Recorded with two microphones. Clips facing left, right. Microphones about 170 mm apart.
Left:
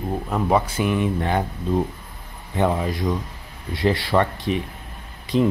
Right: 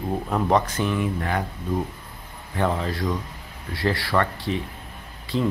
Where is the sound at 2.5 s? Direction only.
15° left (ahead or behind).